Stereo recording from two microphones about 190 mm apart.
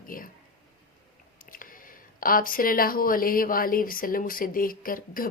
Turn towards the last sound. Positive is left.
turn(degrees=50)  # may be behind; listen again after turning